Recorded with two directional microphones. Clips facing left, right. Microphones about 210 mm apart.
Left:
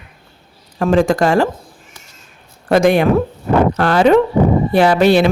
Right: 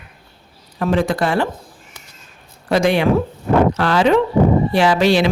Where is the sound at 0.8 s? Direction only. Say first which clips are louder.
Left 4 dB; 45° left (ahead or behind).